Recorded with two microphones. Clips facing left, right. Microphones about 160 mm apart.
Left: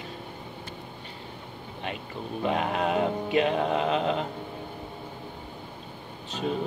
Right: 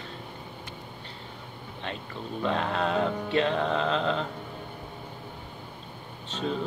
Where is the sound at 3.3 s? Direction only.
10° left (ahead or behind).